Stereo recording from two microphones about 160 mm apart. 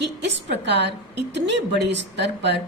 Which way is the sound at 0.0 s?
90° right.